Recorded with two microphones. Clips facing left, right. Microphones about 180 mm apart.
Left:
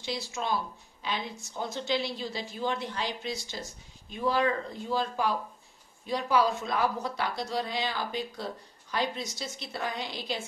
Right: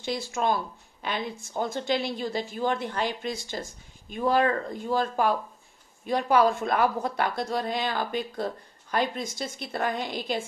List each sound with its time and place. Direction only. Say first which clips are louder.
0.0 s a woman's voice: right 6 dB; 50° right (ahead or behind)